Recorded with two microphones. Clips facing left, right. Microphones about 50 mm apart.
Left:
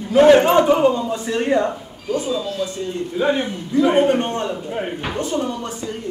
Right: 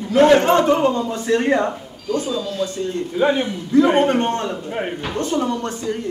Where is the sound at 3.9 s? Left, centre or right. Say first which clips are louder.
Even; right.